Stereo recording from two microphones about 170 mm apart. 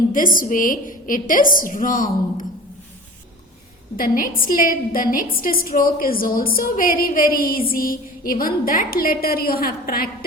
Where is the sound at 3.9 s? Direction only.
55° left (ahead or behind).